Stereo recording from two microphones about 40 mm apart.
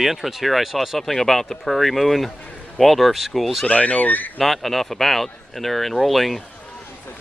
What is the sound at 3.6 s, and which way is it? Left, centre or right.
Speech, left.